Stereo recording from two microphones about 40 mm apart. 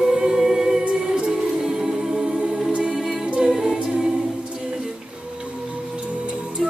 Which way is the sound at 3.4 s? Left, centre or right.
Centre.